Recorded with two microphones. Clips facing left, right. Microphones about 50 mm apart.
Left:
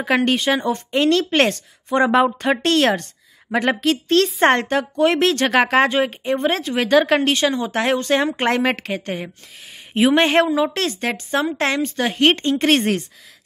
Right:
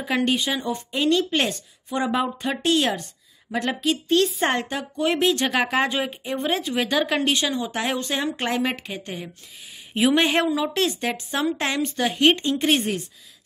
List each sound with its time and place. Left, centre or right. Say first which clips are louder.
0.0 s a woman's voice: left 5 dB; left
2.2 s speech: left 8 dB; left
2.6 s a woman's voice: left 2 dB; left
8.7 s a woman's voice: left 7 dB; left
9.9 s speech: left 5 dB; left